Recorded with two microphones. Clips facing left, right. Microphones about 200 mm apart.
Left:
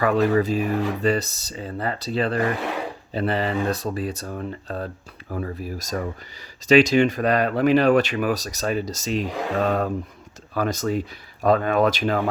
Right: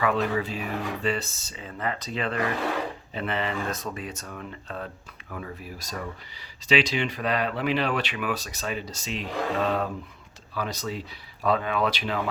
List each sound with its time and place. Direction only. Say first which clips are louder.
0.0 s speech: left 6 dB; 40° left (ahead or behind)